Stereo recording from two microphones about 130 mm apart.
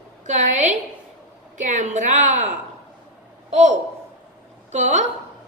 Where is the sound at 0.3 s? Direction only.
65° right (ahead or behind).